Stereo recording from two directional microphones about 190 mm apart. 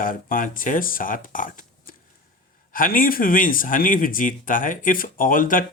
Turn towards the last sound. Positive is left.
turn(degrees=45)  # may be behind; listen again after turning